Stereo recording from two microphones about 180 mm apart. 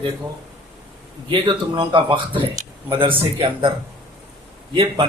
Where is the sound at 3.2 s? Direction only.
25° right (ahead or behind).